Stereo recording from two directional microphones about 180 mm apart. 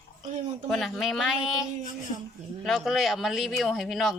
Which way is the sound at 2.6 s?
Centre (ahead or behind).